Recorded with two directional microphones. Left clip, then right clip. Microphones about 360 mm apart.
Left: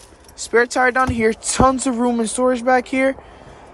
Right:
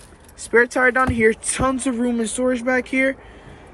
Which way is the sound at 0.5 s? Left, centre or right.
Centre.